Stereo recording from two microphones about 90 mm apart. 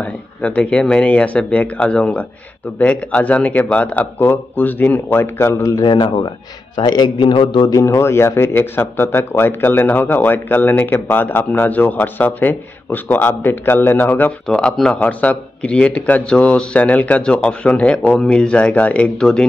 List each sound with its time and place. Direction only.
0.0 s speech: 15° left (ahead or behind)
5.8 s a man's voice: 60° left (ahead or behind)
7.7 s speech: 35° left (ahead or behind)
14.5 s speech: 5° left (ahead or behind)
19.1 s speech: 5° left (ahead or behind)